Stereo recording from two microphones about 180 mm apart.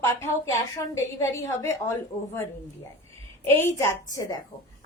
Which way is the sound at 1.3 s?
20° left (ahead or behind).